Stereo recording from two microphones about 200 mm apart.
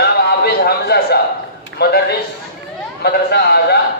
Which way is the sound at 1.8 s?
55° left (ahead or behind).